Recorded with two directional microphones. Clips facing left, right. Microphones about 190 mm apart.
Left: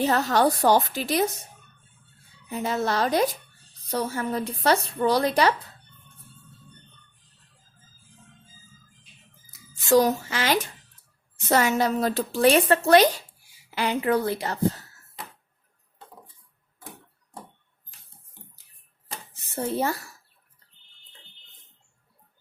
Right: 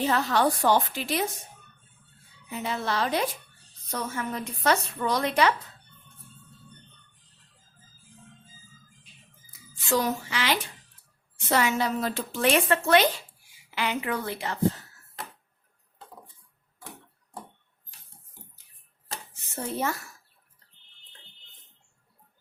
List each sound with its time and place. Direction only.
0.0 s a woman's voice: 40° left (ahead or behind)
2.5 s a woman's voice: 40° left (ahead or behind)
9.9 s music: 40° left (ahead or behind)
11.3 s a woman's voice: 45° left (ahead or behind)
19.3 s speech: 35° left (ahead or behind)